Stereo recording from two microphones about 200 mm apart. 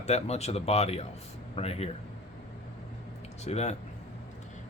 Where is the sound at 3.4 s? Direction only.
35° left (ahead or behind).